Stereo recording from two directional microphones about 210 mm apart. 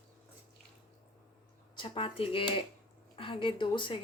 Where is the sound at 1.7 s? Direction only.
25° left (ahead or behind).